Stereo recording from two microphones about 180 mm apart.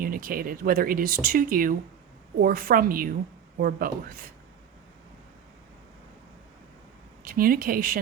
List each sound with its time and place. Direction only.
0.0 s speech: 55° right (ahead or behind)
7.3 s speech: 50° right (ahead or behind)